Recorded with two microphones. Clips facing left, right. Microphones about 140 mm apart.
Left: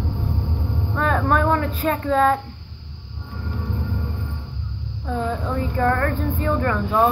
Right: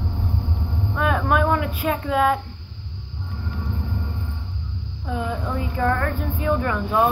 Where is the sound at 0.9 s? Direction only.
10° right (ahead or behind).